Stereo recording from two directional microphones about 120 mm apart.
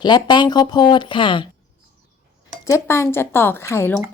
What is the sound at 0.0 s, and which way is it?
A woman's voice, 40° left (ahead or behind).